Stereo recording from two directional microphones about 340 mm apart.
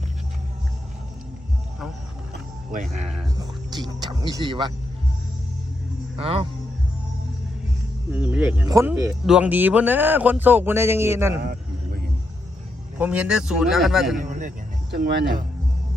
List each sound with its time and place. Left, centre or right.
2.7 s a man's voice: centre
6.1 s speech: centre
8.1 s speech: centre
11.4 s vehicle: right
13.0 s speech: centre
14.2 s speech: right